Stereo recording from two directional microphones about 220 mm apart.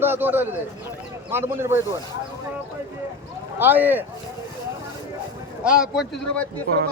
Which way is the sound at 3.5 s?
10° right (ahead or behind).